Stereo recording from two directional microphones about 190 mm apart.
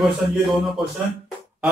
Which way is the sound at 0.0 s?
Centre (ahead or behind).